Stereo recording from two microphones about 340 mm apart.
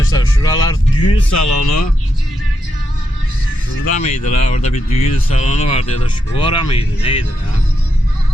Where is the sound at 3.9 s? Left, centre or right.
Centre.